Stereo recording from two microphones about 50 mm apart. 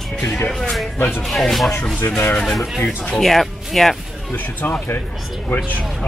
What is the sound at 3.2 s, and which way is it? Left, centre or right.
Speech, centre.